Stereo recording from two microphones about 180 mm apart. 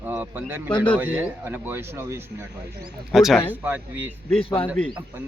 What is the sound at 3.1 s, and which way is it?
A man's voice, centre (ahead or behind).